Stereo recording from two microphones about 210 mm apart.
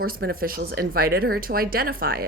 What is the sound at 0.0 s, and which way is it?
Speech, 45° right (ahead or behind).